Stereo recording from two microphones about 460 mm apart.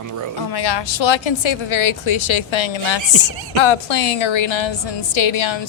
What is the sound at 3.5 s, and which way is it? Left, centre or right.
A woman's voice, left.